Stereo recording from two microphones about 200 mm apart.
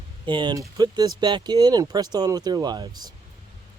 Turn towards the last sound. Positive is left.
turn(degrees=-20)  # may be behind; listen again after turning